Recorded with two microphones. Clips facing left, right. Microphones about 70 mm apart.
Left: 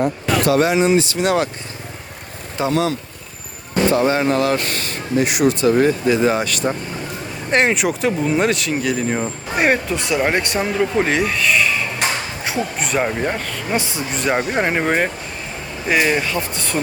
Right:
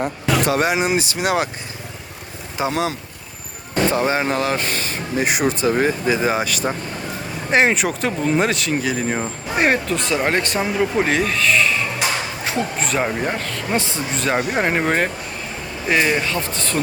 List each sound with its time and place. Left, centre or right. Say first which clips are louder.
0.0 s speech: left 2 dB; centre
2.6 s speech: left 3 dB; centre
3.9 s speech: left 5 dB; right
5.2 s speech: left 2 dB; right
5.6 s speech: left 3 dB; centre
12.5 s a sound: even; centre
12.8 s speech: left 3 dB; centre